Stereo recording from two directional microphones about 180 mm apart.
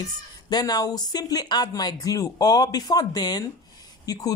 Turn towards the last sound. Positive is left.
turn(degrees=20)  # may be behind; listen again after turning